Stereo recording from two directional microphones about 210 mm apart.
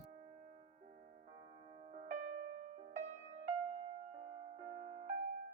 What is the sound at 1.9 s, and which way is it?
Music, 35° right (ahead or behind).